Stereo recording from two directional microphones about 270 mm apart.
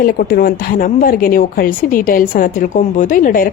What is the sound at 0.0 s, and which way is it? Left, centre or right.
A woman's voice, left.